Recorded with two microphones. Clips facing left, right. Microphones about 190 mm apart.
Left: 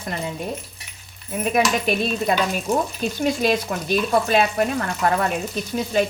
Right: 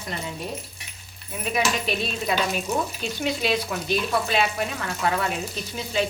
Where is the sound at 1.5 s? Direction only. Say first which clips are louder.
Left 4 dB; 50° left (ahead or behind).